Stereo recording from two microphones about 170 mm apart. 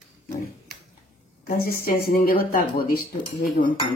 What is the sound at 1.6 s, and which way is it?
Speech, 60° left (ahead or behind).